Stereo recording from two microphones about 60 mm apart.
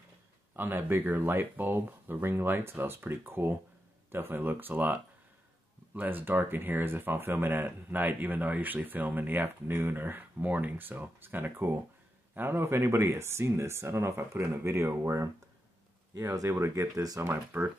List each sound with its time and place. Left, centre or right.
0.6 s speech: right
16.4 s speech: right
17.2 s speech: right